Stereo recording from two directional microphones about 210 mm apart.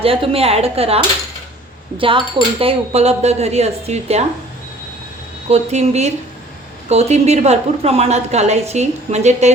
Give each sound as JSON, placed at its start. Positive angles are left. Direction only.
{"t": 0.0, "sound": "a woman's voice", "side_deg": -25}
{"t": 5.5, "sound": "a woman's voice", "side_deg": -30}